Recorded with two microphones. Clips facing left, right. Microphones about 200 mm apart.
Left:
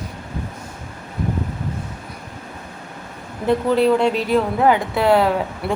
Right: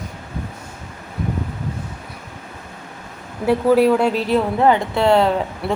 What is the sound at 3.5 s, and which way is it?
Speech, 10° right (ahead or behind).